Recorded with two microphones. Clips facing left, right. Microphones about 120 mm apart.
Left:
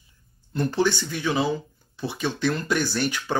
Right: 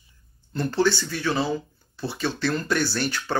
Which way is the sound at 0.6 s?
15° left (ahead or behind).